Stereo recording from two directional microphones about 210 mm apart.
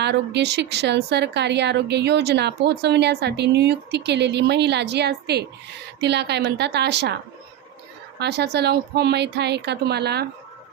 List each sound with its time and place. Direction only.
0.0 s a woman's voice: 55° right (ahead or behind)
8.2 s a woman's voice: 50° right (ahead or behind)